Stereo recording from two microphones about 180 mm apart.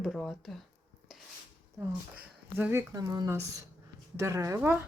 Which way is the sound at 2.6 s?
15° right (ahead or behind).